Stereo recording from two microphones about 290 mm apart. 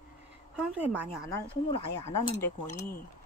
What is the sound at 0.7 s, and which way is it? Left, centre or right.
Speech, centre.